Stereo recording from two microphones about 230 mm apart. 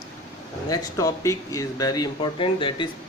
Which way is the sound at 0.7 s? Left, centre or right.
Centre.